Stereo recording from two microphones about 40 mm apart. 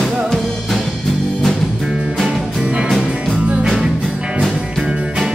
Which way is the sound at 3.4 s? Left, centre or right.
Right.